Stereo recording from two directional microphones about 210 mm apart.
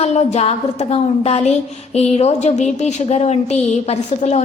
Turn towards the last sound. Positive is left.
turn(degrees=30)  # may be behind; listen again after turning